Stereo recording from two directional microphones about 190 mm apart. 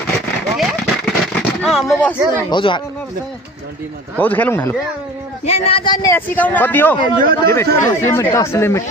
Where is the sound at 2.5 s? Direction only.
25° left (ahead or behind).